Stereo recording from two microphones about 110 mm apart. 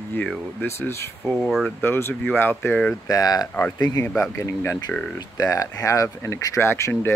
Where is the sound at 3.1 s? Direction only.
35° left (ahead or behind).